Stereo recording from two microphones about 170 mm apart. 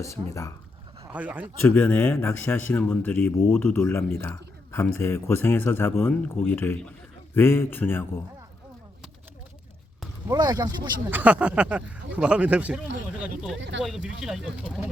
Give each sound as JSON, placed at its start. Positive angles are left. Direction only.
{"t": 0.0, "sound": "a man's voice", "side_deg": 15}
{"t": 1.0, "sound": "speech", "side_deg": -10}
{"t": 1.6, "sound": "a man's voice", "side_deg": 10}
{"t": 10.2, "sound": "speech", "side_deg": -25}
{"t": 11.1, "sound": "speech", "side_deg": -10}
{"t": 13.6, "sound": "speech", "side_deg": -90}
{"t": 14.2, "sound": "speech", "side_deg": -5}